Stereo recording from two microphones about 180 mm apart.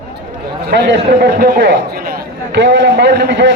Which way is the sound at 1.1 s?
70° right (ahead or behind).